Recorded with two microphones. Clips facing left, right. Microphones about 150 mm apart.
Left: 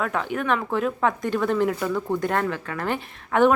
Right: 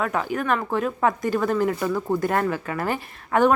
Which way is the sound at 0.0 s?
Centre (ahead or behind).